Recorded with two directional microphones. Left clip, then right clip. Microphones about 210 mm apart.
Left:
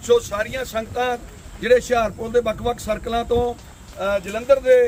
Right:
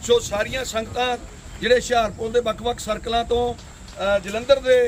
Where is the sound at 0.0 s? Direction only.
Centre (ahead or behind).